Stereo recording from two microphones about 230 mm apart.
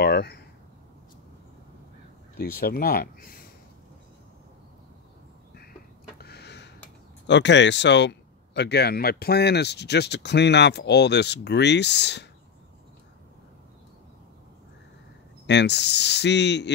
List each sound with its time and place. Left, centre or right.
0.0 s speech: left
2.3 s speech: left
5.5 s a sound: left
7.2 s speech: left
15.4 s speech: left